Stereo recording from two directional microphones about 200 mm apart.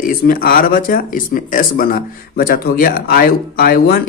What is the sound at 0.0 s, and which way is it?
Speech, 45° left (ahead or behind).